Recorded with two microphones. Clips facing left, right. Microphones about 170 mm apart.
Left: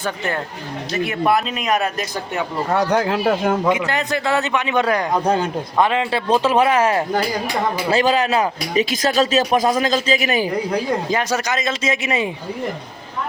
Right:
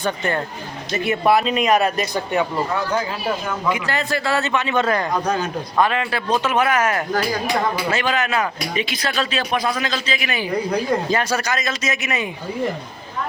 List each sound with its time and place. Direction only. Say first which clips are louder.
0.0 s speech: right 1 dB; 5° left (ahead or behind)
2.9 s speech: left 5 dB; 70° left (ahead or behind)
3.7 s a man's voice: left 3 dB; 20° left (ahead or behind)
5.2 s speech: left 3 dB; 30° left (ahead or behind)
11.1 s speech: left 1 dB; 20° left (ahead or behind)